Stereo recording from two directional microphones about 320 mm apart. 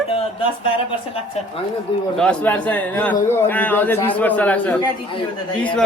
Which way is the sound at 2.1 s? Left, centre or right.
Centre.